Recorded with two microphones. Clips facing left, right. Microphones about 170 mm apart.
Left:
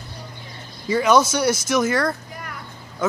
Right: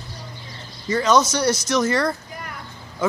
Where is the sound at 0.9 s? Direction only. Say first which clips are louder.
Left 1 dB; 5° left (ahead or behind).